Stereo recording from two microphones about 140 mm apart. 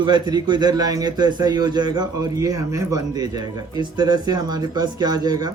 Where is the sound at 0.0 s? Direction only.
30° right (ahead or behind).